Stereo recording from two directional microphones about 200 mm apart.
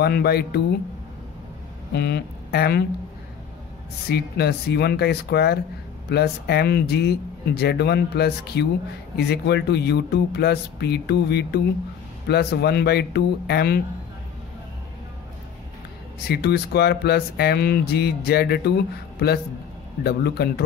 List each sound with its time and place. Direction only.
0.0 s speech: 55° left (ahead or behind)
2.0 s speech: 55° left (ahead or behind)
4.1 s speech: 55° left (ahead or behind)
16.3 s speech: 50° left (ahead or behind)